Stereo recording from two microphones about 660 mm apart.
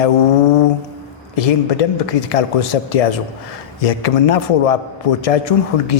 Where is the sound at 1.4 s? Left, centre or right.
Left.